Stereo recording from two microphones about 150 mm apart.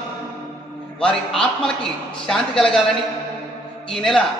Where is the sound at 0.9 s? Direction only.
5° left (ahead or behind).